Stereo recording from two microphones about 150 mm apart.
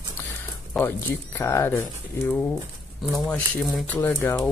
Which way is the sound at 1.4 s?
15° left (ahead or behind).